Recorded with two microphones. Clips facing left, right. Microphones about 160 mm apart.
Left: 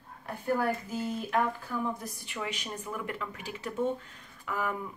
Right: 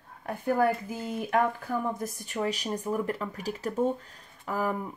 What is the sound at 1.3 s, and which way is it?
Speech, 45° right (ahead or behind).